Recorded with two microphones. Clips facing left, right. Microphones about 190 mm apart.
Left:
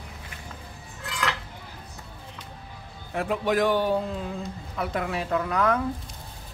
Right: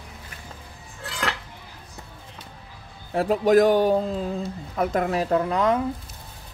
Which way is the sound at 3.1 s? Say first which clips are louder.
Right 7 dB; 35° right (ahead or behind).